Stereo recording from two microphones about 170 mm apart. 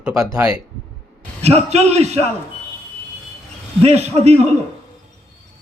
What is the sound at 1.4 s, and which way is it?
Speech, 40° right (ahead or behind).